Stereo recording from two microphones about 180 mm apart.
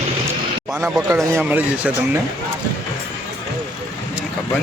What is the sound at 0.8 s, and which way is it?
Speech, 10° right (ahead or behind).